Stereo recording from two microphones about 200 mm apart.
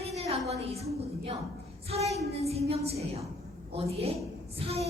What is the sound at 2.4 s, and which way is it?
Speech, 30° right (ahead or behind).